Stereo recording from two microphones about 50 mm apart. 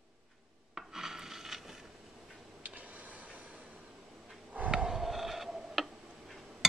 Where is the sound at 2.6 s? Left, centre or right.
Right.